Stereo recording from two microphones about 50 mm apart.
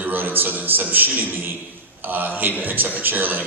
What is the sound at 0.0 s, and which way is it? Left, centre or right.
A man's voice, right.